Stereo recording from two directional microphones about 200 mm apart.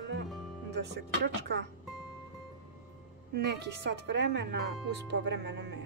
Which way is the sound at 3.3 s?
55° right (ahead or behind).